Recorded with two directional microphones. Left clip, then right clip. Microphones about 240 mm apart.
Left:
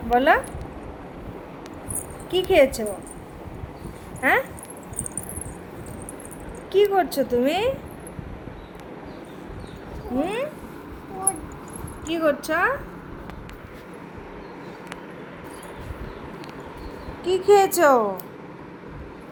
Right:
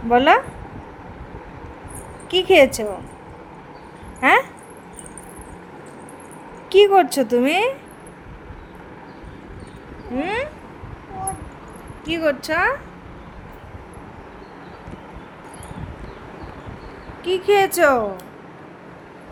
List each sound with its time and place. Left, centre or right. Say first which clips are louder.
0.1 s speech: right 4 dB; right
2.3 s speech: right 4 dB; right
4.2 s a sound: right 5 dB; right
6.7 s speech: right 6 dB; right
10.2 s speech: right 2 dB; right
12.0 s speech: right 2 dB; right
17.2 s a woman's voice: even; centre